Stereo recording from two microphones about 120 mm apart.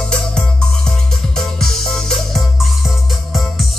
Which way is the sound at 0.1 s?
5° left (ahead or behind).